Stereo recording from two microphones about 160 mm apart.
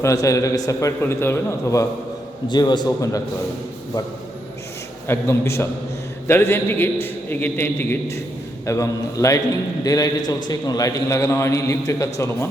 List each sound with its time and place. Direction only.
0.0 s a man's voice: 20° left (ahead or behind)
5.0 s a man's voice: 15° left (ahead or behind)